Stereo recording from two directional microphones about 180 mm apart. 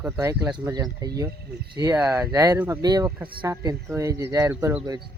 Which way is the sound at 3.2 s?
10° right (ahead or behind).